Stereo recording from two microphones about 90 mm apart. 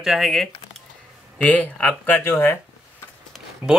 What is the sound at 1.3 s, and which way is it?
Speech, 15° left (ahead or behind).